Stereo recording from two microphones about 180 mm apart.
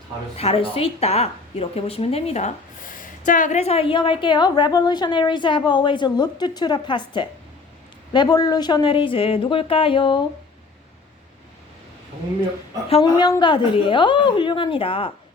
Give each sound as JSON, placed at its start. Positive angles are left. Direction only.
{"t": 0.3, "sound": "a woman's voice", "side_deg": 35}
{"t": 12.9, "sound": "a woman's voice", "side_deg": 25}